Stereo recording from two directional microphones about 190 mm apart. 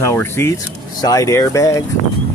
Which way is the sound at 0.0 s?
15° left (ahead or behind).